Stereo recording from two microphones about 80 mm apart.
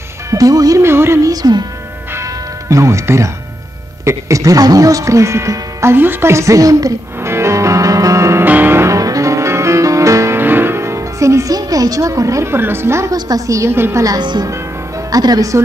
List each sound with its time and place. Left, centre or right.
0.3 s speech: right
0.8 s speech: right
1.2 s speech: right
2.1 s music: right
4.0 s speech: right
7.2 s music: right
8.5 s music: right
13.1 s speech: right
15.0 s speech: right